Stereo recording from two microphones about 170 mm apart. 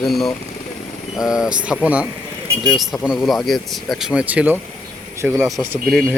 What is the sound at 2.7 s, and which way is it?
Speech, centre (ahead or behind).